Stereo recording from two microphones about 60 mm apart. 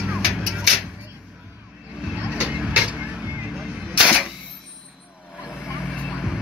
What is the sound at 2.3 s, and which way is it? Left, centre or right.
Music, centre.